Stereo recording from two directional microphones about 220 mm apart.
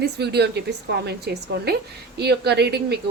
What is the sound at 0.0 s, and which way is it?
Speech, 50° right (ahead or behind).